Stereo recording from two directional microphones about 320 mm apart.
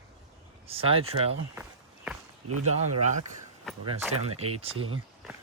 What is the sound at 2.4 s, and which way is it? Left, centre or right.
Speech, right.